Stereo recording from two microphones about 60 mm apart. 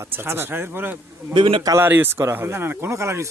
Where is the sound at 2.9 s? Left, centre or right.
Right.